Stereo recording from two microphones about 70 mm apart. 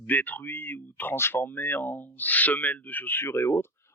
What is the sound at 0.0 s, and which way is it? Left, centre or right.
Speech, left.